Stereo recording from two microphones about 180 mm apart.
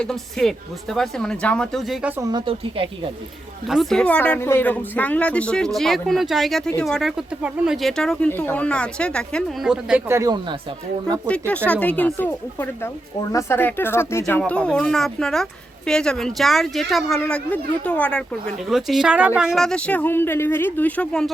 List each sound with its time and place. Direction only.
0.0 s speech: 5° left (ahead or behind)
2.2 s a woman's voice: 25° right (ahead or behind)
3.7 s speech: centre (ahead or behind)
10.2 s a woman's voice: 25° right (ahead or behind)
11.3 s speech: 10° left (ahead or behind)